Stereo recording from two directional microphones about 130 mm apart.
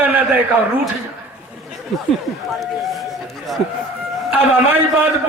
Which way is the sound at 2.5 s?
Centre (ahead or behind).